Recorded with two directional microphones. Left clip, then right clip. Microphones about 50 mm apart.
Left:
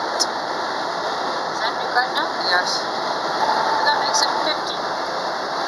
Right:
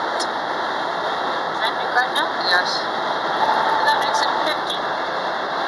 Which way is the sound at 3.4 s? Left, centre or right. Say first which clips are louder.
Right 1 dB; centre.